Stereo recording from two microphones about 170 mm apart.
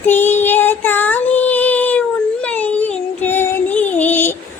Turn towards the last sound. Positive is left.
turn(degrees=10)  # may be behind; listen again after turning